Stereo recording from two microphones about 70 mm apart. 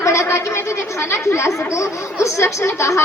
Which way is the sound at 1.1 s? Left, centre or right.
Left.